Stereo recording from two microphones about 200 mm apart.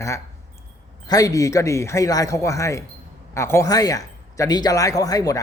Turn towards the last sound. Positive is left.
turn(degrees=15)  # may be behind; listen again after turning